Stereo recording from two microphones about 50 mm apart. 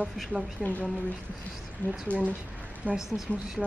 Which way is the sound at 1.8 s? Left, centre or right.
Left.